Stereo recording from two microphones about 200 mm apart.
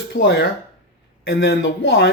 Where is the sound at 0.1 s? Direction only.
60° left (ahead or behind).